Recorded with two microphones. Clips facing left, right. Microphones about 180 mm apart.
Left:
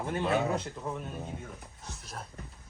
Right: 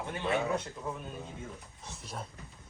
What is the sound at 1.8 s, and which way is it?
Speech, centre (ahead or behind).